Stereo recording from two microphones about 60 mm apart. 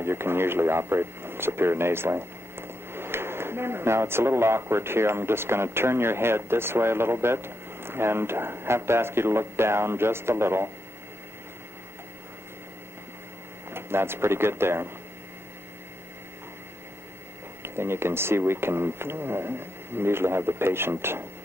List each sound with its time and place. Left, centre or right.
0.0 s speech: right
13.7 s speech: right
17.6 s speech: right